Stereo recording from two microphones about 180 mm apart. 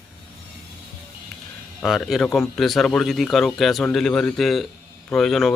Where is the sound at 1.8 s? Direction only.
Centre (ahead or behind).